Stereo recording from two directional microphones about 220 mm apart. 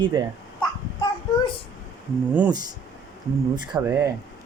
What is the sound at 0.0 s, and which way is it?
Speech, 20° right (ahead or behind).